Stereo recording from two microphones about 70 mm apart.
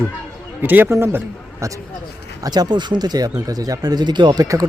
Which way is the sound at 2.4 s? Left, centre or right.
Right.